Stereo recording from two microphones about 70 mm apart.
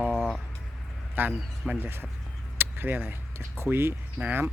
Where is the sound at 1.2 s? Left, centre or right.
Right.